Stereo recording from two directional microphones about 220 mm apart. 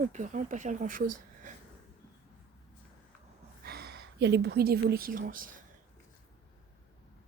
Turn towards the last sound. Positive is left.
turn(degrees=-40)  # may be behind; listen again after turning